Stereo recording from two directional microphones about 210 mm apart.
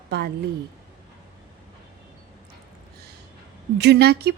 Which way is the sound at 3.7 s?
50° right (ahead or behind).